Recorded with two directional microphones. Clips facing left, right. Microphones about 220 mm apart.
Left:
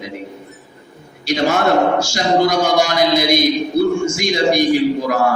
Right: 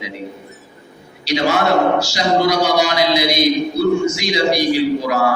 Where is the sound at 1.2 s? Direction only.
50° left (ahead or behind).